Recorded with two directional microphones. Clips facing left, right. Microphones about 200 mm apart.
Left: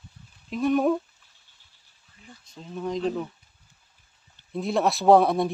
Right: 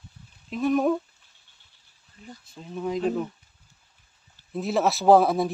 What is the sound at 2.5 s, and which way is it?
Speech, 5° right (ahead or behind).